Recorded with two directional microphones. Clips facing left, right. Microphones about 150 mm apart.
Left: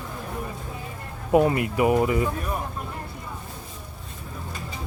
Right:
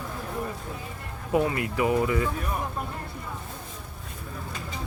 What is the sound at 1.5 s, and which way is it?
Speech, 20° left (ahead or behind).